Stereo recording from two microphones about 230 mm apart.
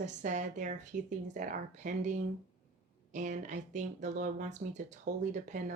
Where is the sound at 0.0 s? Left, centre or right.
Right.